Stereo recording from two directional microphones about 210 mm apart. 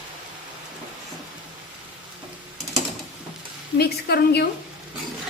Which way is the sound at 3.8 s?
50° left (ahead or behind).